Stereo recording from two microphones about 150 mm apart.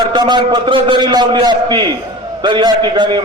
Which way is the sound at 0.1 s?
30° right (ahead or behind).